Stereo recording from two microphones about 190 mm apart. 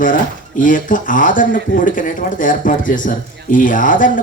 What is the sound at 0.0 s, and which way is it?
Speech, 45° left (ahead or behind).